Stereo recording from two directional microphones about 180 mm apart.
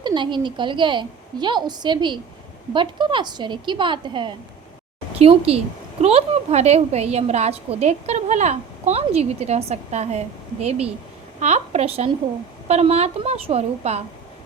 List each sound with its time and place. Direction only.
0.0 s a woman's voice: 25° right (ahead or behind)